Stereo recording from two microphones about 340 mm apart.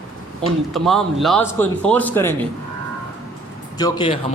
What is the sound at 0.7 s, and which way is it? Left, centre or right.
A man's voice, centre.